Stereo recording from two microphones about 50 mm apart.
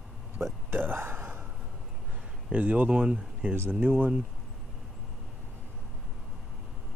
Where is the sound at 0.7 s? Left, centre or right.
Right.